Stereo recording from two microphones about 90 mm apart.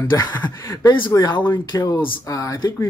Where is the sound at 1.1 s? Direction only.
35° left (ahead or behind).